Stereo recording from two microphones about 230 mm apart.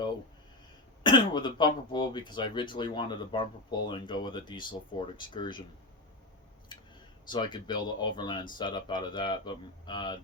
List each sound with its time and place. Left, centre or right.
1.0 s speech: centre
7.3 s speech: centre